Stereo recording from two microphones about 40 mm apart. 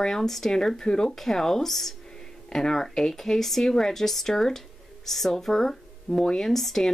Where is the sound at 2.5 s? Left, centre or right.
Centre.